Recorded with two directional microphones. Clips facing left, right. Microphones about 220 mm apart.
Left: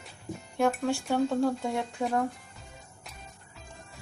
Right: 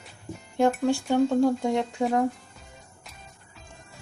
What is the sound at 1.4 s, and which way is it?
Speech, 15° right (ahead or behind).